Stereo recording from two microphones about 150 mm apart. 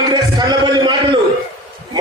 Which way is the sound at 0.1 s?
25° right (ahead or behind).